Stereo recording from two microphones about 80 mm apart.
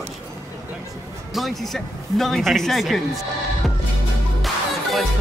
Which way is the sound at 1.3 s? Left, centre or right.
Centre.